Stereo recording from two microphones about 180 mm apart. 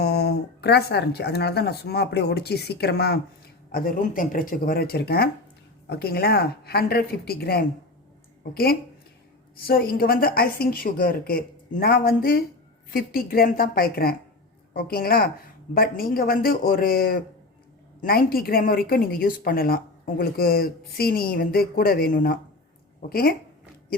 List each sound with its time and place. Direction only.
0.0 s a woman's voice: 60° left (ahead or behind)
9.6 s a woman's voice: 55° left (ahead or behind)